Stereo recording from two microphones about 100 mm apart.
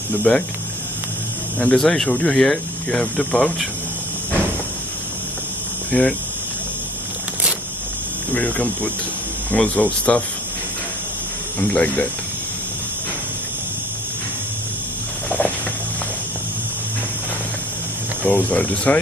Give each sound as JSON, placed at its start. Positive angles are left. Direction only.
{"t": 0.3, "sound": "speech", "side_deg": 10}
{"t": 1.6, "sound": "speech", "side_deg": 10}
{"t": 5.9, "sound": "speech", "side_deg": 15}
{"t": 8.3, "sound": "speech", "side_deg": 15}
{"t": 11.6, "sound": "speech", "side_deg": 15}
{"t": 15.2, "sound": "a sound", "side_deg": 15}
{"t": 18.2, "sound": "speech", "side_deg": 15}